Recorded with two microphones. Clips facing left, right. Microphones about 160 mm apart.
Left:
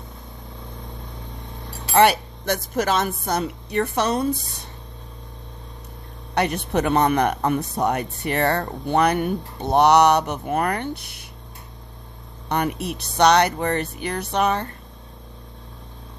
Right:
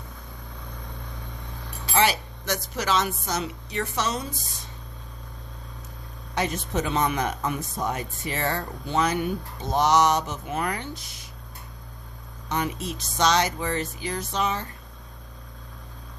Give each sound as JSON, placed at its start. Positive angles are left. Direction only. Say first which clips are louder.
{"t": 1.9, "sound": "speech", "louder": "left 7 dB", "side_deg": 55}
{"t": 6.3, "sound": "speech", "louder": "left 5 dB", "side_deg": 65}
{"t": 12.5, "sound": "speech", "louder": "left 4 dB", "side_deg": 60}